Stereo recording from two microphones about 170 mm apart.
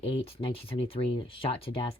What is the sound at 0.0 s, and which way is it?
Speech, 35° left (ahead or behind).